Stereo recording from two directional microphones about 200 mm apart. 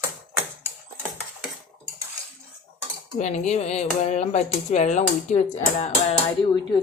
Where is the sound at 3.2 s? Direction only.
35° left (ahead or behind).